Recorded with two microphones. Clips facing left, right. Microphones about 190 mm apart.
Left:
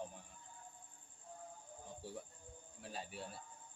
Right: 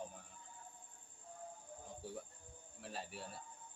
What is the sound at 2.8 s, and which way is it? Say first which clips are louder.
Speech: even; centre (ahead or behind).